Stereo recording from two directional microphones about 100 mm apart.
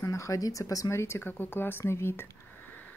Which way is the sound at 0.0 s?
35° left (ahead or behind).